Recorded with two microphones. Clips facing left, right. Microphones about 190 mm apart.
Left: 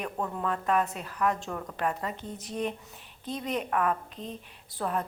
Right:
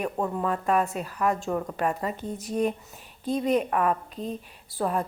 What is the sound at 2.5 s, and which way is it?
A woman's voice, 45° right (ahead or behind).